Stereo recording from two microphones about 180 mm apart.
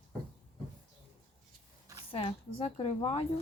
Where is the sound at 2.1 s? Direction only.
30° left (ahead or behind).